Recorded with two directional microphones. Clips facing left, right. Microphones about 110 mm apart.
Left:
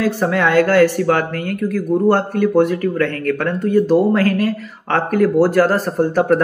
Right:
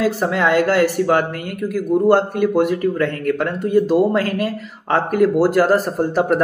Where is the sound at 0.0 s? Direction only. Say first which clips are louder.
Left 1 dB; 15° right (ahead or behind).